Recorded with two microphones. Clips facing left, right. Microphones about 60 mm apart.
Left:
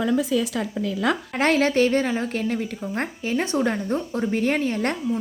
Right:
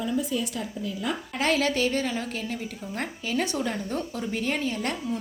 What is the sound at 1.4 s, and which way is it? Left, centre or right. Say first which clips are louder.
Speech: left 5 dB; left.